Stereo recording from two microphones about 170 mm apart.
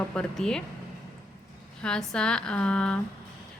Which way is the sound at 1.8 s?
5° left (ahead or behind).